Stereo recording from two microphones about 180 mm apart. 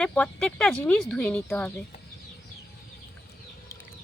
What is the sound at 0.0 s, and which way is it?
Speech, 5° left (ahead or behind).